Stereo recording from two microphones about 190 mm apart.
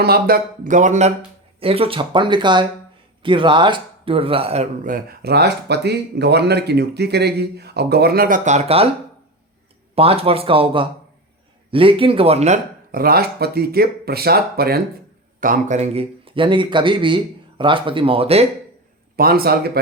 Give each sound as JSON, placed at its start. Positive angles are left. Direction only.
{"t": 0.0, "sound": "speech", "side_deg": -50}
{"t": 9.9, "sound": "speech", "side_deg": -30}
{"t": 12.9, "sound": "speech", "side_deg": -50}
{"t": 19.1, "sound": "speech", "side_deg": -50}